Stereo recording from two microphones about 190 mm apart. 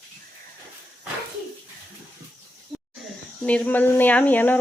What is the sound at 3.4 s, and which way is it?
Speech, 10° left (ahead or behind).